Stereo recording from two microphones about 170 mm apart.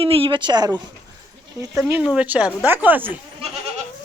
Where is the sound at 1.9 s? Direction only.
10° right (ahead or behind).